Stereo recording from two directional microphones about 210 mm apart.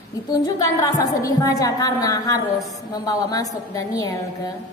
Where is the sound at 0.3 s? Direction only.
15° left (ahead or behind).